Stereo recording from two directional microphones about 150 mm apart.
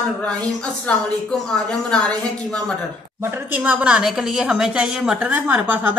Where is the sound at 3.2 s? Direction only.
15° right (ahead or behind).